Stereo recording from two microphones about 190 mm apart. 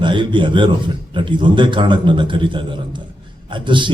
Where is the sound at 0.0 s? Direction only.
25° right (ahead or behind).